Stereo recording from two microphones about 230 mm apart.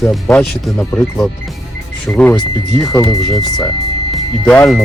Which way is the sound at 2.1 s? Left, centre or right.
Centre.